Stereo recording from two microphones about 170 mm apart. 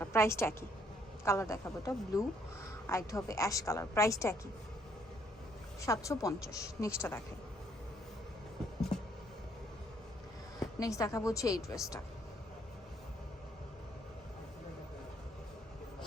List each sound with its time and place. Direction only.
0.0 s a woman's voice: 15° left (ahead or behind)
5.8 s a woman's voice: 20° left (ahead or behind)
10.6 s speech: 20° left (ahead or behind)